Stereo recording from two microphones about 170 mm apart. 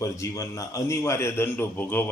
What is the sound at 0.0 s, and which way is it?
A man's voice, 20° left (ahead or behind).